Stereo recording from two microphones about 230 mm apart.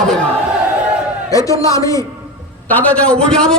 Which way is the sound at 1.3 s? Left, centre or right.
Centre.